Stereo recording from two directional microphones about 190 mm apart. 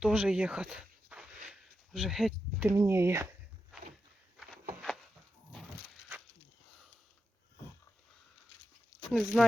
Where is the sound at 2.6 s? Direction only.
15° right (ahead or behind).